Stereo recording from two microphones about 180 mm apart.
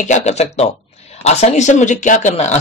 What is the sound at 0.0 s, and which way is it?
Speech, 40° left (ahead or behind).